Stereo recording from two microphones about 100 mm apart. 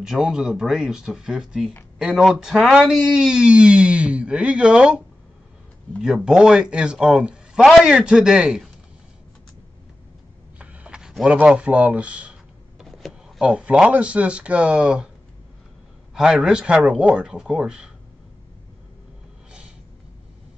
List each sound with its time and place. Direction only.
0.0 s speech: 5° right (ahead or behind)
10.6 s a sound: 15° right (ahead or behind)
11.4 s speech: 10° right (ahead or behind)
16.2 s speech: 5° right (ahead or behind)